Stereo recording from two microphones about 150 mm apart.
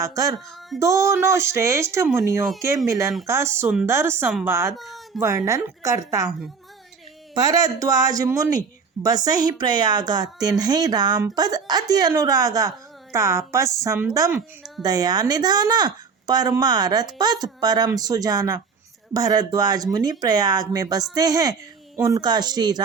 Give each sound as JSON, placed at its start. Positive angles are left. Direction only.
{"t": 0.0, "sound": "speech", "side_deg": -20}
{"t": 4.8, "sound": "speech", "side_deg": 0}
{"t": 5.2, "sound": "speech", "side_deg": -20}
{"t": 7.3, "sound": "speech", "side_deg": -25}